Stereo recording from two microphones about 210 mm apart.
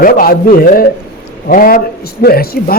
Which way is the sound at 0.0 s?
45° left (ahead or behind).